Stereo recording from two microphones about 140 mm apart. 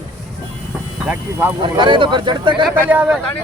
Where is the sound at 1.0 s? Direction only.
15° right (ahead or behind).